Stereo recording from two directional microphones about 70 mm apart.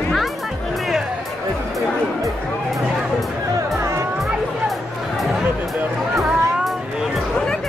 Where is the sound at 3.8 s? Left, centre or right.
Right.